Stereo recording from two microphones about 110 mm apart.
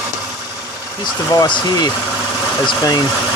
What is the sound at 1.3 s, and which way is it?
Speech, 40° left (ahead or behind).